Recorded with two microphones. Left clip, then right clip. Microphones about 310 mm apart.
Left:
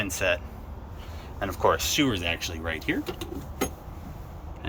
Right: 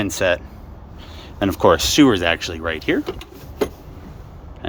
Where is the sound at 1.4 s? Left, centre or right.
Right; by 3.0 s centre.